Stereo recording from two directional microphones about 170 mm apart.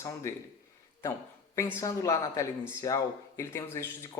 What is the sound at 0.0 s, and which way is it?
Speech, 20° left (ahead or behind).